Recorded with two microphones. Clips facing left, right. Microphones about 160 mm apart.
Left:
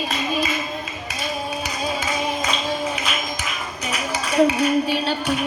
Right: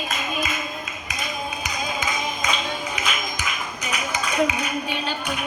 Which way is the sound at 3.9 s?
30° left (ahead or behind).